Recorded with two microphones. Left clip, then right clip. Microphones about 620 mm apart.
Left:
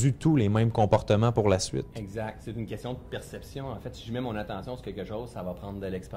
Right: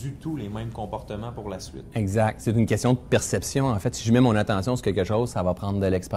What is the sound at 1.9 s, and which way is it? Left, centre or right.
Speech, right.